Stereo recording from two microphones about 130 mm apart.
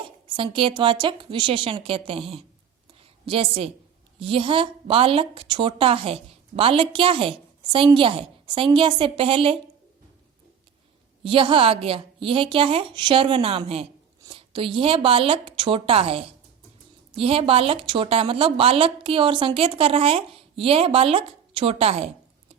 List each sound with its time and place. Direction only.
0.3 s a woman's voice: 40° right (ahead or behind)
11.2 s a woman's voice: 45° right (ahead or behind)